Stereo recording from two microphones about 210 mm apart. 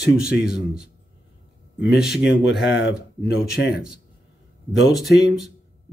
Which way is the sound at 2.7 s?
55° left (ahead or behind).